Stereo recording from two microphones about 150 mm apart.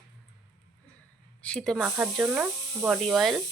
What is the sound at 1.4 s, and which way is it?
Speech, 5° left (ahead or behind).